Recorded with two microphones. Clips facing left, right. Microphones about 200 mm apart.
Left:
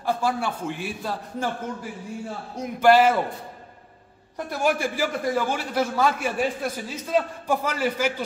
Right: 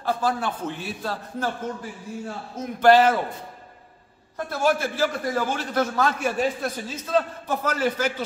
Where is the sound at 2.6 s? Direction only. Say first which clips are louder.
Right 1 dB; 10° left (ahead or behind).